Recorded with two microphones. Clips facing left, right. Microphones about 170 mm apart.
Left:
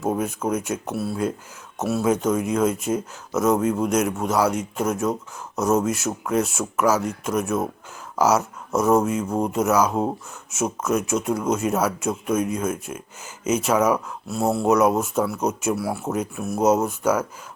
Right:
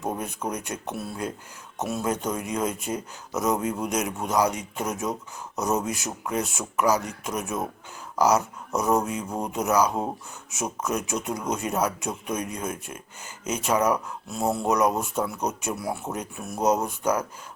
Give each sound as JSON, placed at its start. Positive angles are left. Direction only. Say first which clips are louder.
{"t": 0.0, "sound": "speech", "louder": "left 6 dB", "side_deg": 5}